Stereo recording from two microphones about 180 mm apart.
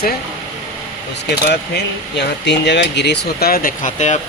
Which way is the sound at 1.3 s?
70° left (ahead or behind).